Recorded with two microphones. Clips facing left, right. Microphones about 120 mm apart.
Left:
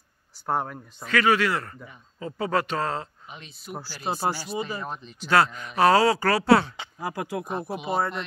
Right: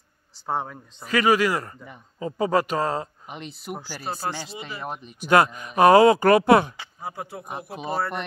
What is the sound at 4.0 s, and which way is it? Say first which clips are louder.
Speech: left 5 dB; 20° left (ahead or behind).